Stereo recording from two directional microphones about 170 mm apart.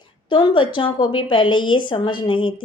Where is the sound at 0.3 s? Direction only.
30° left (ahead or behind).